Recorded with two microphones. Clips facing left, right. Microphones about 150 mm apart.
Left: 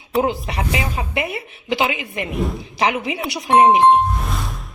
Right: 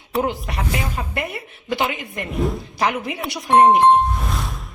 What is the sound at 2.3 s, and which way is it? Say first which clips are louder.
Speech: right 2 dB; centre (ahead or behind).